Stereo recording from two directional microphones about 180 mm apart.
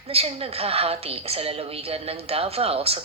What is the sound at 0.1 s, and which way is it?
A woman's voice, 35° right (ahead or behind).